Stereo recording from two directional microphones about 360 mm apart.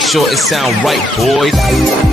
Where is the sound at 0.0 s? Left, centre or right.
Centre.